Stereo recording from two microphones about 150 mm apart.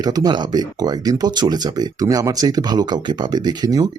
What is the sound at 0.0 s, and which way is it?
Speech, 25° right (ahead or behind).